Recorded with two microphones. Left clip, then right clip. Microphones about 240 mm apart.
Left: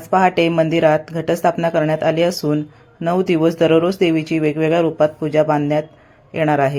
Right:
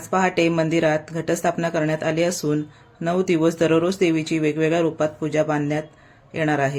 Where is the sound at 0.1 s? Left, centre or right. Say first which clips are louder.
Left 5 dB; centre.